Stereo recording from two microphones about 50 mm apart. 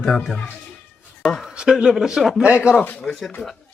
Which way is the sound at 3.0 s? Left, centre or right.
Centre.